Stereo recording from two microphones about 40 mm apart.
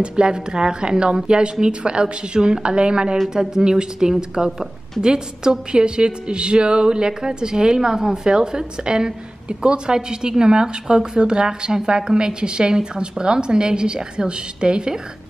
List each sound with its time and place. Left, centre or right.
0.0 s a woman's voice: right